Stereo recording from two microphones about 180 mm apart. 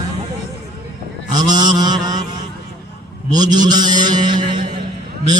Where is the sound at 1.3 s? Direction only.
25° right (ahead or behind).